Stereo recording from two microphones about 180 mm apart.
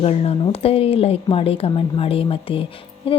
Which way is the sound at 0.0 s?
35° left (ahead or behind).